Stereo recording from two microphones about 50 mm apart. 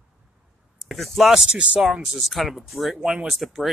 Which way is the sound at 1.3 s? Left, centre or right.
Right.